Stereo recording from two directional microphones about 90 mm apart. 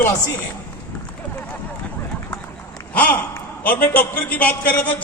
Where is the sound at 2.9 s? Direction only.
15° left (ahead or behind).